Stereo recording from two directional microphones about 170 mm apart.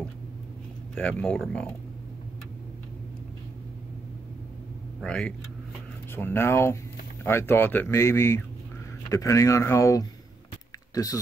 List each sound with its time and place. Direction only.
0.9 s speech: 5° left (ahead or behind)
5.0 s speech: 5° left (ahead or behind)